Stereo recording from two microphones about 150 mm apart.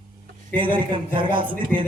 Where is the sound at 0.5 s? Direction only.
35° right (ahead or behind).